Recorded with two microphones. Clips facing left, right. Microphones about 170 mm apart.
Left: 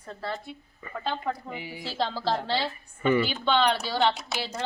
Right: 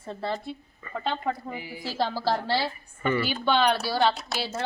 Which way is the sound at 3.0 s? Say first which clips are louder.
Left 3 dB; 15° left (ahead or behind).